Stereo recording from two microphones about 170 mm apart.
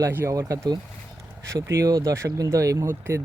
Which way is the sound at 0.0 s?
15° right (ahead or behind).